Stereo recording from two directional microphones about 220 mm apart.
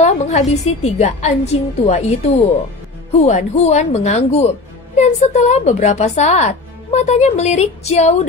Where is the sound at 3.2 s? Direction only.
30° left (ahead or behind).